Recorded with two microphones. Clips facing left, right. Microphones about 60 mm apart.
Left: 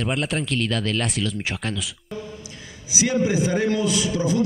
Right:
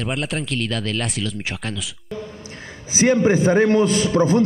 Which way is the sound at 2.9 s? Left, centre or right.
Right.